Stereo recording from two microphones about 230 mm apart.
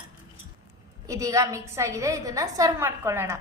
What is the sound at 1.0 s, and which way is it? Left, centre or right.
A woman's voice, centre.